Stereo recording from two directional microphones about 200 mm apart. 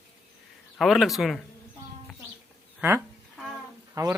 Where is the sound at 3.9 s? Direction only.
15° right (ahead or behind).